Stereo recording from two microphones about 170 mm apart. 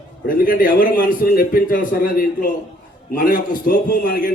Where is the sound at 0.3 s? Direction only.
55° left (ahead or behind).